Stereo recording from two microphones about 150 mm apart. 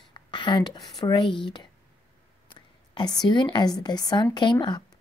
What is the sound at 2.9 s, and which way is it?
Speech, 30° left (ahead or behind).